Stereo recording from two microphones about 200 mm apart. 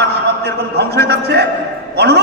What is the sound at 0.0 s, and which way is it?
A man's voice, 55° right (ahead or behind).